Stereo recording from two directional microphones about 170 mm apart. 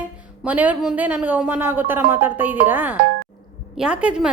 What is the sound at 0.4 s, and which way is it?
A woman's voice, 10° right (ahead or behind).